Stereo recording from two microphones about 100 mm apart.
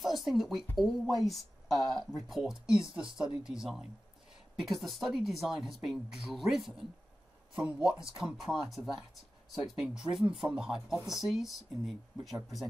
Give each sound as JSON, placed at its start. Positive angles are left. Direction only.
{"t": 0.0, "sound": "speech", "side_deg": 0}
{"t": 8.2, "sound": "speech", "side_deg": -5}
{"t": 10.2, "sound": "speech", "side_deg": -55}
{"t": 10.5, "sound": "speech", "side_deg": -5}